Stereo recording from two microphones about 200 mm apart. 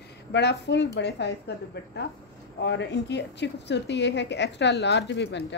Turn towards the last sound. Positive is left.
turn(degrees=60)  # may be behind; listen again after turning